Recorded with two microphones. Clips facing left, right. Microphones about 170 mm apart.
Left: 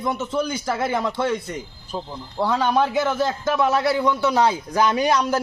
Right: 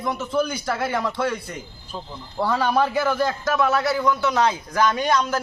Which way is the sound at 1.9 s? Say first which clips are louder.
Left 5 dB; 15° left (ahead or behind).